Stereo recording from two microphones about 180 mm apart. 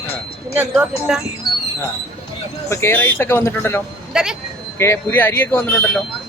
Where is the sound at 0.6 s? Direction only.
5° right (ahead or behind).